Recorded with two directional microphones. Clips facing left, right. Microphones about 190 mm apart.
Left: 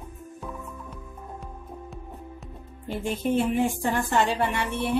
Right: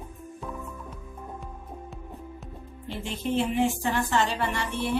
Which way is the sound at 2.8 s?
45° left (ahead or behind).